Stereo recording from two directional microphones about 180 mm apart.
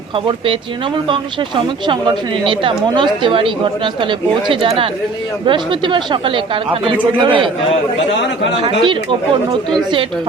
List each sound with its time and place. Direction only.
2.5 s speech: 25° right (ahead or behind)
8.6 s speech: 25° right (ahead or behind)